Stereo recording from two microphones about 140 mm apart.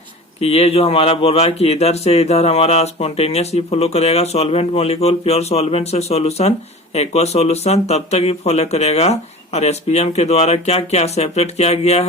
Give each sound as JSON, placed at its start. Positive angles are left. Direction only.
{"t": 0.3, "sound": "speech", "side_deg": 45}